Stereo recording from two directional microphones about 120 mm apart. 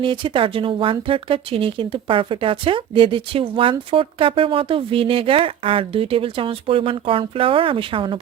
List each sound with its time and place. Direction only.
0.0 s speech: 40° right (ahead or behind)